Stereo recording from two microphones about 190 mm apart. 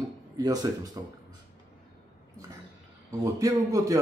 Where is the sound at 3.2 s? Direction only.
20° right (ahead or behind).